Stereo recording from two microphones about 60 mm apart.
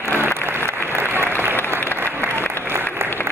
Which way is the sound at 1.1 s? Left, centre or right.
Right.